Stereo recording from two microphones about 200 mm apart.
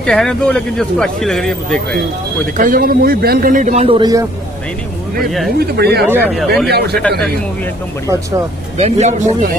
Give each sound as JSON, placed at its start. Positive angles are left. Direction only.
{"t": 0.0, "sound": "speech", "side_deg": 5}
{"t": 2.5, "sound": "a man's voice", "side_deg": -45}
{"t": 5.6, "sound": "a man's voice", "side_deg": -55}
{"t": 6.2, "sound": "speech", "side_deg": 0}
{"t": 6.7, "sound": "a man's voice", "side_deg": -55}
{"t": 7.0, "sound": "speech", "side_deg": 5}
{"t": 8.7, "sound": "speech", "side_deg": -30}